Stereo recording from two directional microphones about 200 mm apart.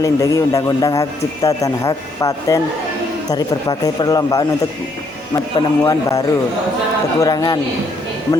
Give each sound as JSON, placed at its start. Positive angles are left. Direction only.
{"t": 0.0, "sound": "a man's voice", "side_deg": 15}